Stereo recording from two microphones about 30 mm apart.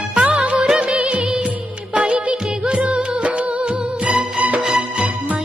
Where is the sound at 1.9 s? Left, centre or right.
Right.